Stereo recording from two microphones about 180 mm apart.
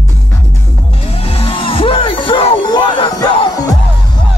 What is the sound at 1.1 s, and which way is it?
Music, 35° left (ahead or behind).